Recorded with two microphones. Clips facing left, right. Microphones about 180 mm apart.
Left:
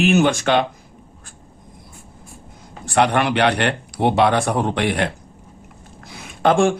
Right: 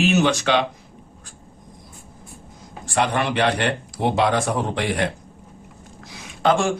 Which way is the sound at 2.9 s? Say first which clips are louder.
Left 4 dB; 65° left (ahead or behind).